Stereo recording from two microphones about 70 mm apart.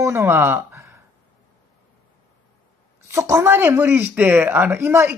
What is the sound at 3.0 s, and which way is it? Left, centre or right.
Speech, right.